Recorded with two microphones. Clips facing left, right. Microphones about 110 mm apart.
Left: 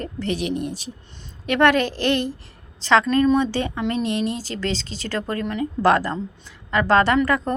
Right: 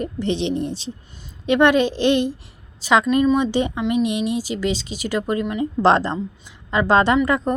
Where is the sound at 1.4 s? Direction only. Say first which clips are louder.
Right 2 dB; 20° right (ahead or behind).